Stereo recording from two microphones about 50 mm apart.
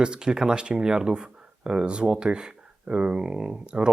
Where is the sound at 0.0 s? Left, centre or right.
Centre.